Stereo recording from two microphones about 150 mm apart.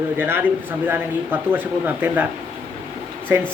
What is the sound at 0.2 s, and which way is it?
Speech, 15° right (ahead or behind).